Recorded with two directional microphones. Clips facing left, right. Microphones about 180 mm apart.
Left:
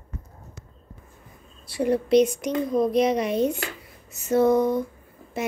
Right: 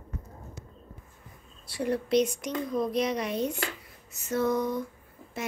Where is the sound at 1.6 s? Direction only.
20° left (ahead or behind).